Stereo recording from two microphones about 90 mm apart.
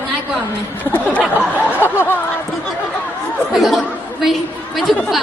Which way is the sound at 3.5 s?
Centre (ahead or behind).